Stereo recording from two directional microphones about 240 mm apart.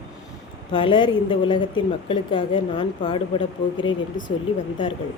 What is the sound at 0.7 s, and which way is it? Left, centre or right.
A woman's voice, left.